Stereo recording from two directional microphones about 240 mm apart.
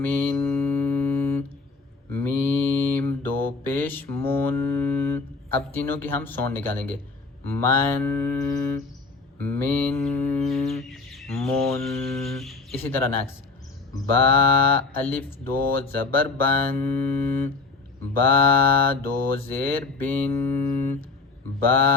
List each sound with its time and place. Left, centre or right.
0.0 s mantra: centre
12.2 s speech: centre
13.9 s mantra: centre
18.9 s mantra: centre